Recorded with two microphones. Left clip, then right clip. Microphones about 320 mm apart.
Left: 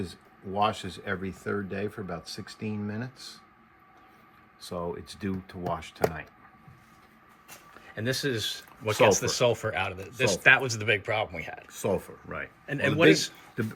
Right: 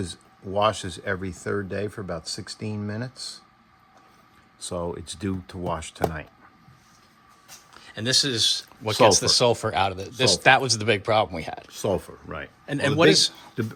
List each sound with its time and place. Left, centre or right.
0.0 s speech: right
4.6 s speech: right
7.7 s speech: centre
11.7 s speech: right
12.6 s speech: centre